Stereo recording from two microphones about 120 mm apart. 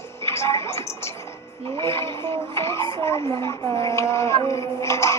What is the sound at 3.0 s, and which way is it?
Speech, 25° left (ahead or behind).